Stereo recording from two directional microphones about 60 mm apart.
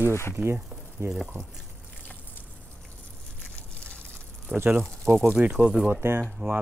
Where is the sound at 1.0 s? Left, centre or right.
Right.